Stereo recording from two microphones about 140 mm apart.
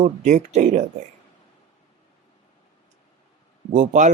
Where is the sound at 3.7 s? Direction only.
60° right (ahead or behind).